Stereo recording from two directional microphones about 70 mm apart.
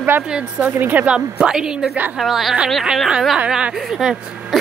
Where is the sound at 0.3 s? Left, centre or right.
Centre.